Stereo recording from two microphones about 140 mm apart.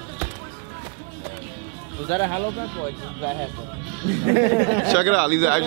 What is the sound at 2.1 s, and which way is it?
Speech, 15° right (ahead or behind).